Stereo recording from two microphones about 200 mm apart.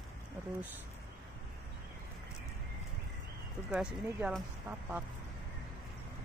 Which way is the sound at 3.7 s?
5° right (ahead or behind).